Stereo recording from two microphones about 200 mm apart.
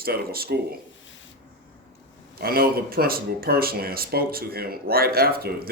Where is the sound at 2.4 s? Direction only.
50° right (ahead or behind).